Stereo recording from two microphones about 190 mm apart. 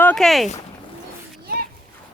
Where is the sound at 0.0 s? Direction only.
5° left (ahead or behind).